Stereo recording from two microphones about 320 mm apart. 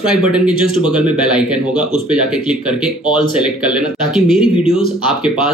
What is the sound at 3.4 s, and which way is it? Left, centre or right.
Speech, centre.